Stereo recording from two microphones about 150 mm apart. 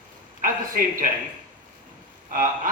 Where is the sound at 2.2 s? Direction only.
65° right (ahead or behind).